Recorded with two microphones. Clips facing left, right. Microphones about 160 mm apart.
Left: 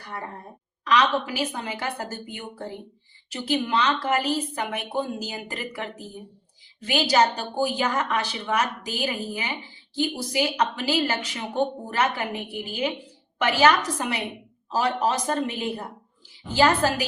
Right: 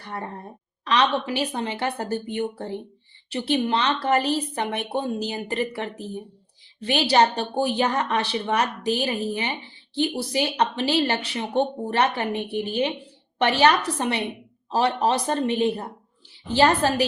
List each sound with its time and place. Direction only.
0.9 s a woman's voice: 30° right (ahead or behind)
6.9 s a woman's voice: 35° right (ahead or behind)